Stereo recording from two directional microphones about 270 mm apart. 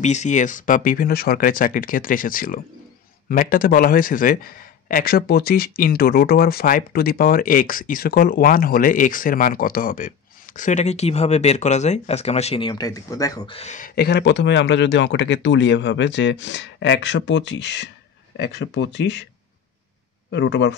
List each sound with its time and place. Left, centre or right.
0.0 s a man's voice: left
20.2 s a man's voice: left